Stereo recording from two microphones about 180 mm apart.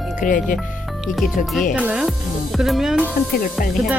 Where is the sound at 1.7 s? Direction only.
5° right (ahead or behind).